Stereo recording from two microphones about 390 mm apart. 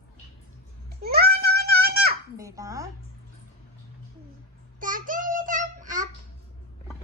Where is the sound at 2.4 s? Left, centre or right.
Centre.